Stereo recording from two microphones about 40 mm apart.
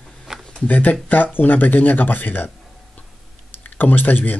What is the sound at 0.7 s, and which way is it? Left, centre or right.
Speech, left.